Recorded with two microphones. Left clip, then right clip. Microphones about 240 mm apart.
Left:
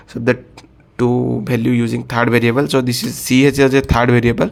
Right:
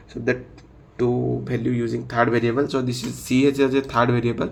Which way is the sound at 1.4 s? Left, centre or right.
Left.